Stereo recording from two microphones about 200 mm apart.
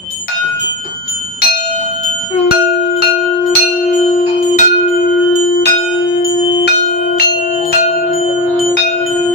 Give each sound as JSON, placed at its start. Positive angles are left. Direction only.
{"t": 3.9, "sound": "bell", "side_deg": 40}